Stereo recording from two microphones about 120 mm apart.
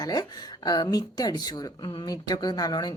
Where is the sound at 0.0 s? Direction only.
30° left (ahead or behind).